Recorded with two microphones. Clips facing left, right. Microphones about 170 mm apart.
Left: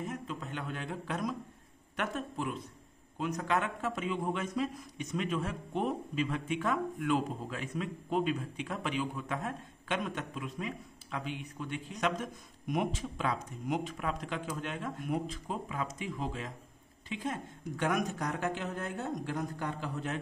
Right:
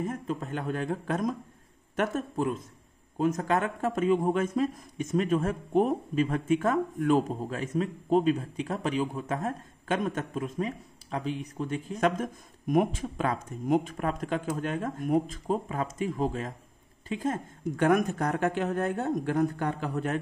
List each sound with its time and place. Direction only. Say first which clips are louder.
0.0 s a man's voice: right 7 dB; 45° right (ahead or behind)